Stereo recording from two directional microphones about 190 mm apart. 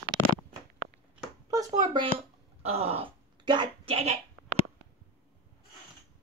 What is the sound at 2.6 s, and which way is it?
Throat clearing, 30° right (ahead or behind).